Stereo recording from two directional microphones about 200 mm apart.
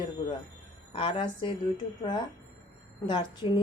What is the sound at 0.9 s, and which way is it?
Speech, 25° left (ahead or behind).